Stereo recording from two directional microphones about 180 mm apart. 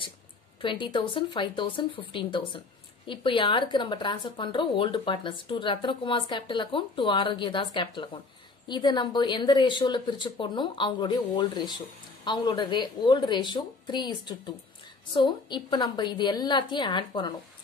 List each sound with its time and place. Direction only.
0.6 s a woman's voice: 30° left (ahead or behind)